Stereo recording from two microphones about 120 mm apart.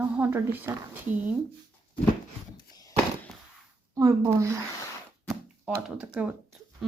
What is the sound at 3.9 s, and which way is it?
Speech, 25° right (ahead or behind).